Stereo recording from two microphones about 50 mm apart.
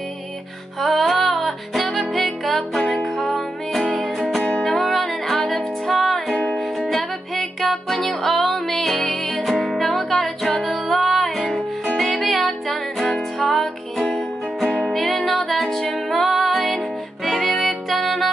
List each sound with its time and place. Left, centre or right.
0.7 s music: centre
4.4 s music: centre
4.6 s music: centre
7.3 s music: centre